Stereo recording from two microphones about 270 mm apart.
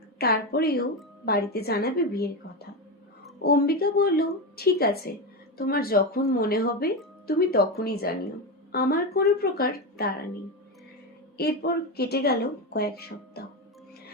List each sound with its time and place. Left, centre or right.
0.2 s speech: left
11.3 s speech: left